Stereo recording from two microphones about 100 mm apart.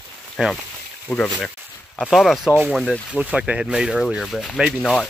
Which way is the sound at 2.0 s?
Centre (ahead or behind).